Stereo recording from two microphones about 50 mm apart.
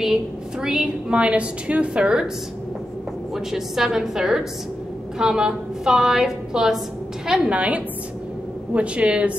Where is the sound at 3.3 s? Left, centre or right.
Centre.